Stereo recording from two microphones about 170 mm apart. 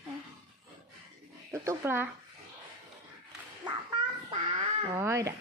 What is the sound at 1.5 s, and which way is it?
Speech, 15° right (ahead or behind).